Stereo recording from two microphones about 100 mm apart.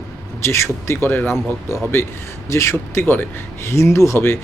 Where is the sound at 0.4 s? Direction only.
25° left (ahead or behind).